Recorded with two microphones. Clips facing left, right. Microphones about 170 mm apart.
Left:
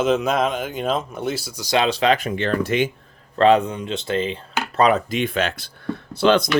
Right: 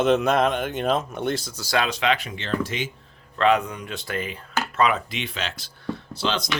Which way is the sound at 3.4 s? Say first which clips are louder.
Left 5 dB; 30° left (ahead or behind).